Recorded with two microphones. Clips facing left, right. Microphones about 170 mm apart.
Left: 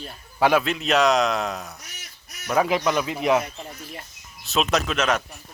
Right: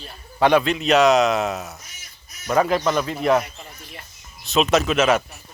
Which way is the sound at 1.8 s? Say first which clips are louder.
Left 1 dB; 70° left (ahead or behind).